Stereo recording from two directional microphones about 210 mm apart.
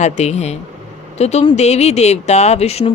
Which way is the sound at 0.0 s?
30° left (ahead or behind).